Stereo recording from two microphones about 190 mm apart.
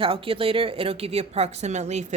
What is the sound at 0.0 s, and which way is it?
A woman's voice, 30° right (ahead or behind).